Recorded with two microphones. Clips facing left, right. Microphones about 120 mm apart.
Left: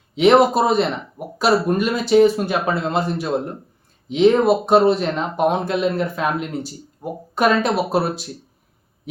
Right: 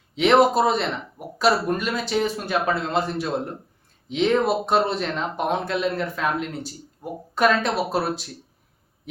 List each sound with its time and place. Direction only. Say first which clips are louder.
0.2 s speech: left 3 dB; 5° left (ahead or behind)